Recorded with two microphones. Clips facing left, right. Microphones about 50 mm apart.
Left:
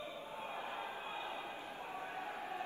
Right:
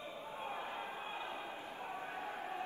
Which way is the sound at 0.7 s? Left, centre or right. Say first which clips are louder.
Even; right.